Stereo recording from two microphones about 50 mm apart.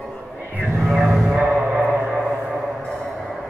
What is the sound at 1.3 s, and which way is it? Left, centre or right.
Music, right.